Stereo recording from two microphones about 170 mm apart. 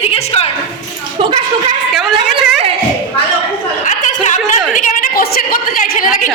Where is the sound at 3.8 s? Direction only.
45° left (ahead or behind).